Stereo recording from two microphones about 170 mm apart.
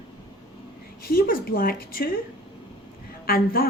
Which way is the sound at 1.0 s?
60° left (ahead or behind).